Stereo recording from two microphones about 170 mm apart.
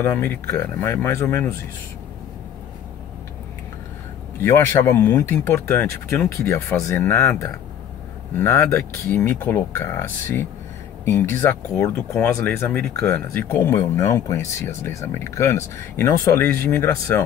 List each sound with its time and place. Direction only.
0.0 s speech: 10° left (ahead or behind)
4.4 s speech: 15° left (ahead or behind)